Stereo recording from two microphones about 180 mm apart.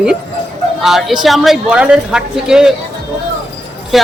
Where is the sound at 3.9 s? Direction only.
Centre (ahead or behind).